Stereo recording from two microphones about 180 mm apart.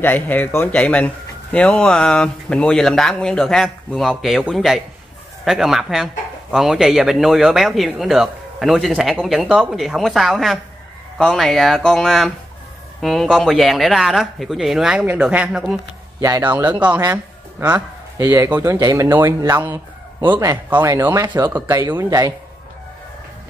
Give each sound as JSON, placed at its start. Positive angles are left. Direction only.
{"t": 0.0, "sound": "speech", "side_deg": 10}
{"t": 16.2, "sound": "speech", "side_deg": -20}